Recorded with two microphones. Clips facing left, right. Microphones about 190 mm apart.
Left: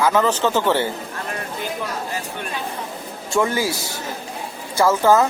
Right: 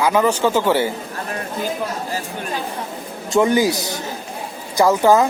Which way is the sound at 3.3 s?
20° right (ahead or behind).